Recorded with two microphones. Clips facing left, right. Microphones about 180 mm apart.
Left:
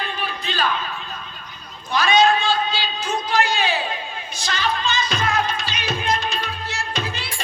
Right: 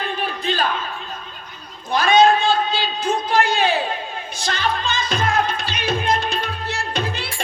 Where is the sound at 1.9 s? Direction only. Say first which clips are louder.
Right 3 dB; 50° right (ahead or behind).